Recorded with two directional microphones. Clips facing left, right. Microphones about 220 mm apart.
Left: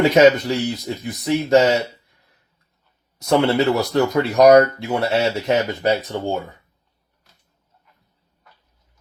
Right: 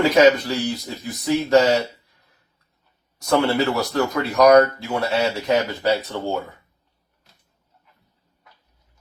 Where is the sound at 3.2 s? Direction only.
25° left (ahead or behind).